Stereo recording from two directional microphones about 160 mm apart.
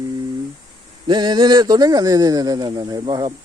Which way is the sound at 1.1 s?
25° right (ahead or behind).